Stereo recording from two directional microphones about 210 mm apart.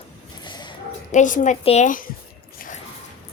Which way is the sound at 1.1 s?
35° left (ahead or behind).